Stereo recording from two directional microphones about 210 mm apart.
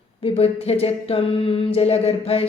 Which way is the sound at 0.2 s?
25° left (ahead or behind).